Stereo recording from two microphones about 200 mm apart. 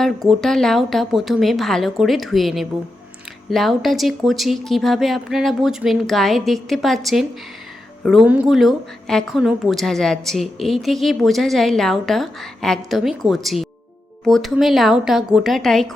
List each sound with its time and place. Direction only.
0.0 s a woman's voice: centre (ahead or behind)